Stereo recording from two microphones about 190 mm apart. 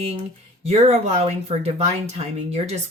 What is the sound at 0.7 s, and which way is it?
Speech, 30° right (ahead or behind).